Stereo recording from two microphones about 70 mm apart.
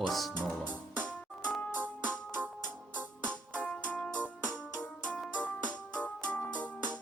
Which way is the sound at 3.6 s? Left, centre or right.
Centre.